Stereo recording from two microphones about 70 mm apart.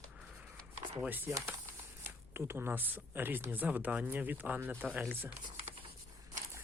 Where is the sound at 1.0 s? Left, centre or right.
Right.